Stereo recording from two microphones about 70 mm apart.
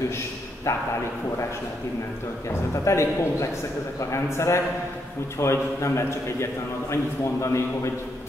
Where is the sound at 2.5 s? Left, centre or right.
Left.